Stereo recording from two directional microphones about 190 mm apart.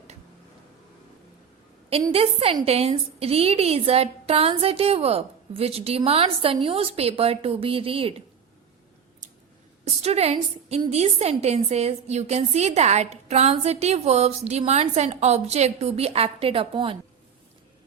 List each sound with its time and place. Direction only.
1.9 s a woman's voice: 30° right (ahead or behind)
9.8 s a woman's voice: 35° right (ahead or behind)